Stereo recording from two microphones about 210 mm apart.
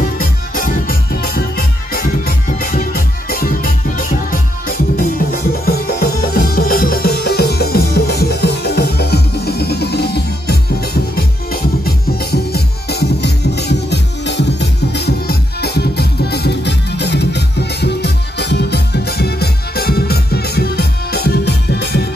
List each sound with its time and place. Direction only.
0.2 s music: 45° left (ahead or behind)